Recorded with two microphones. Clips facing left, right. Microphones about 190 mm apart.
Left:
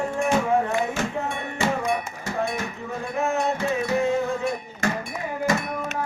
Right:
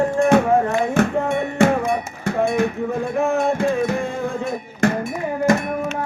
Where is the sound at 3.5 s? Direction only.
50° right (ahead or behind).